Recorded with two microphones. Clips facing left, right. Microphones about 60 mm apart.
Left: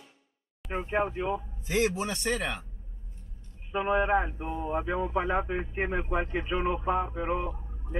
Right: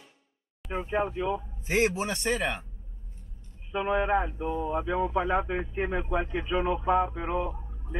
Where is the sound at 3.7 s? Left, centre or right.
Left.